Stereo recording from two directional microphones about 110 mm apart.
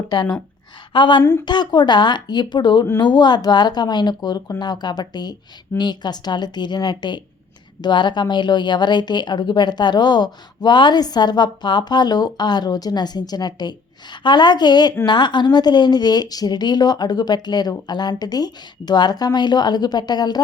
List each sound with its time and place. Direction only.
0.1 s a woman's voice: 40° left (ahead or behind)
1.2 s a woman's voice: 20° left (ahead or behind)
1.5 s speech: 40° left (ahead or behind)